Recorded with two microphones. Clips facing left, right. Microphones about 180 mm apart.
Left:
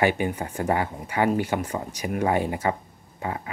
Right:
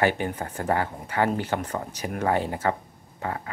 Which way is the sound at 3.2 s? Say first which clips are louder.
Left 1 dB; 15° left (ahead or behind).